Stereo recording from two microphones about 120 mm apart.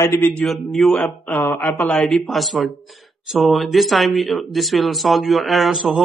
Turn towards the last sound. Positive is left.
turn(degrees=0)  # may be behind; listen again after turning